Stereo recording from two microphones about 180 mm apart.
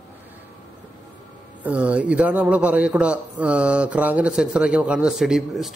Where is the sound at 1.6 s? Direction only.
10° right (ahead or behind).